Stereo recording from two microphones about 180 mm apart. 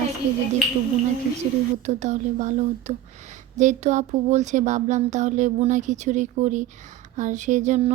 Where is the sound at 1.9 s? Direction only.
40° right (ahead or behind).